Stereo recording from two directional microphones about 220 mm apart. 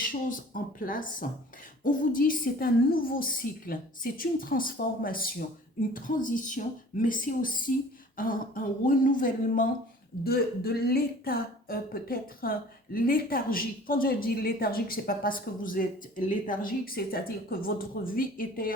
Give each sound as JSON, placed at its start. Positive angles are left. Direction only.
{"t": 0.0, "sound": "speech", "side_deg": 40}